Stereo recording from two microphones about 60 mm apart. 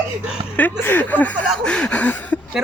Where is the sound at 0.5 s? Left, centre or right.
Left.